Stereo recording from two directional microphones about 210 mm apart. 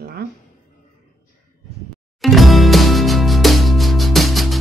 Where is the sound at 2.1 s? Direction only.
Centre (ahead or behind).